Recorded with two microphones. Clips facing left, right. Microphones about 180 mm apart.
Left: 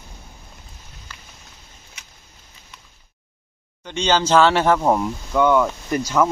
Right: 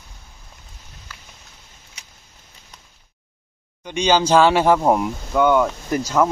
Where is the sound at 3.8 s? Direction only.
15° right (ahead or behind).